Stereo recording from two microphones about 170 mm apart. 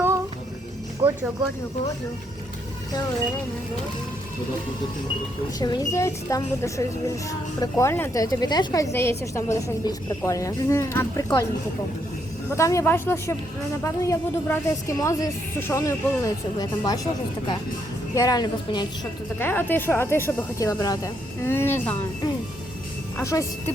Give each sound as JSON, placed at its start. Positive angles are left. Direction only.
{"t": 1.0, "sound": "music", "side_deg": -30}
{"t": 5.5, "sound": "a woman's voice", "side_deg": 25}
{"t": 12.5, "sound": "a woman's voice", "side_deg": 15}
{"t": 18.1, "sound": "a woman's voice", "side_deg": 20}
{"t": 19.4, "sound": "speech", "side_deg": 10}
{"t": 23.1, "sound": "speech", "side_deg": 20}